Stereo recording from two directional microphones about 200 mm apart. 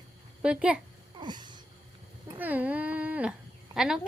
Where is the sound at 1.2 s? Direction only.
20° right (ahead or behind).